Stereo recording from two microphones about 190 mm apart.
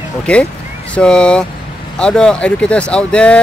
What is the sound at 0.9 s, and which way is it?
Speech, 5° left (ahead or behind).